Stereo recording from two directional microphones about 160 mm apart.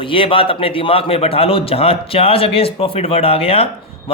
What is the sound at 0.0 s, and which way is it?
A man's voice, 35° left (ahead or behind).